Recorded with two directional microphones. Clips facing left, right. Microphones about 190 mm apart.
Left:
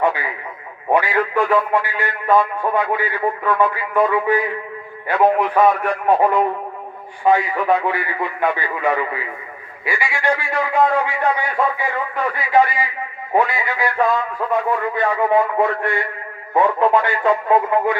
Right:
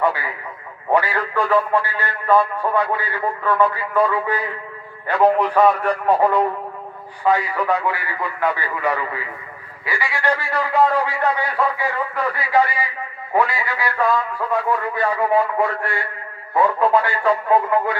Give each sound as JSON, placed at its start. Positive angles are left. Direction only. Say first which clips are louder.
{"t": 0.0, "sound": "a man's voice", "louder": "left 1 dB", "side_deg": 15}
{"t": 10.3, "sound": "a man's voice", "louder": "right 1 dB", "side_deg": -35}
{"t": 11.3, "sound": "a man's voice", "louder": "left 1 dB", "side_deg": 15}